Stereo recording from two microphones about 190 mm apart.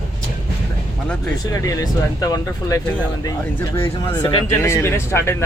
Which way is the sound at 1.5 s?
20° left (ahead or behind).